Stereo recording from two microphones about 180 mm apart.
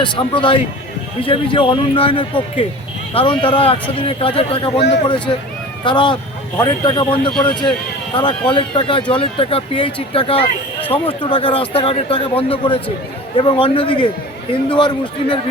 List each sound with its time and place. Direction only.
0.0 s speech: 25° left (ahead or behind)